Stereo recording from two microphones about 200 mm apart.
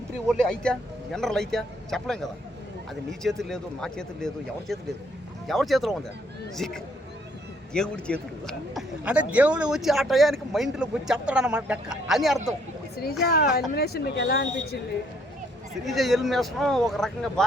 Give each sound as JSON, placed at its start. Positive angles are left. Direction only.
{"t": 0.3, "sound": "a man's voice", "side_deg": 5}
{"t": 13.2, "sound": "speech", "side_deg": 50}
{"t": 15.8, "sound": "a man's voice", "side_deg": 0}